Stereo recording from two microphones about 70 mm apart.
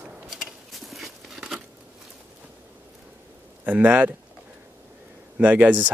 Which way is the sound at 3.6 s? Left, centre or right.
Right.